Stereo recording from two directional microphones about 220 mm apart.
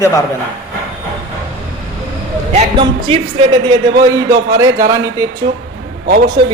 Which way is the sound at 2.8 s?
20° right (ahead or behind).